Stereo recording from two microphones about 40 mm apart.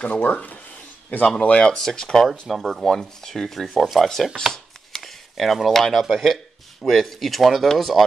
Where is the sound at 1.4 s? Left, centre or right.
Left.